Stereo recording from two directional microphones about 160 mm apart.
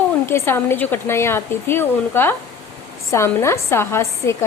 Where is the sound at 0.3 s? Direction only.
15° left (ahead or behind).